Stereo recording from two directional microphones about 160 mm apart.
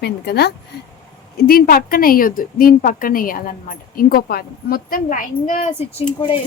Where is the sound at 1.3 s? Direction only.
70° left (ahead or behind); by 5.7 s 55° left (ahead or behind).